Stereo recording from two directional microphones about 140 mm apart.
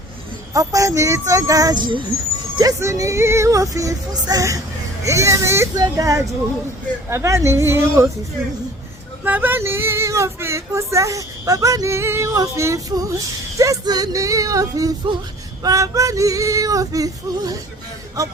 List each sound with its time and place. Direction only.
0.5 s child singing: 25° right (ahead or behind)
9.2 s child singing: 10° right (ahead or behind)